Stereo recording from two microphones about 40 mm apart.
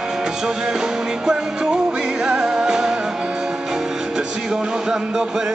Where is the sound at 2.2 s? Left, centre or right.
Centre.